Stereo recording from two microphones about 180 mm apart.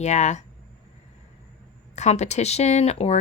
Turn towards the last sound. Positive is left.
turn(degrees=35)  # may be behind; listen again after turning